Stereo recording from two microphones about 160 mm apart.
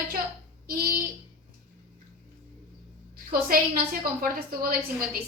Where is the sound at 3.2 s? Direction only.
65° right (ahead or behind).